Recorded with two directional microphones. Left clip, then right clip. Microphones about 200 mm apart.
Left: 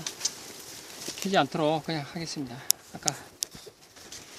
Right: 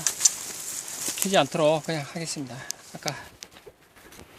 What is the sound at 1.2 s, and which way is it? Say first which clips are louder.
Speech: right 4 dB; 20° right (ahead or behind).